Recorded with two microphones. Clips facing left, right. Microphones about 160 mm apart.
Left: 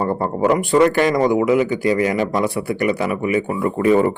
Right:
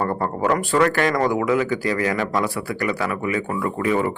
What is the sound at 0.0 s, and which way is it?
A man's voice, 20° left (ahead or behind).